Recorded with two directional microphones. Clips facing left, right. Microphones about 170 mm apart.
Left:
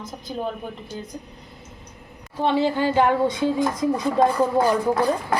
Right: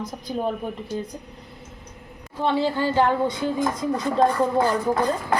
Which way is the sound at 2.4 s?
20° left (ahead or behind).